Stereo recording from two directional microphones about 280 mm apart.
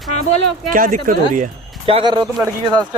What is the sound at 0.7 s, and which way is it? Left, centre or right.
Speech, right.